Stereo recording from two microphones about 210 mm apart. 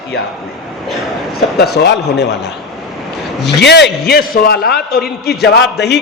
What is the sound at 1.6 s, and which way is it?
Speech, 50° left (ahead or behind).